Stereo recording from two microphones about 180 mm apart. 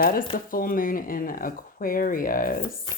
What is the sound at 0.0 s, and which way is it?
A woman's voice, 55° left (ahead or behind).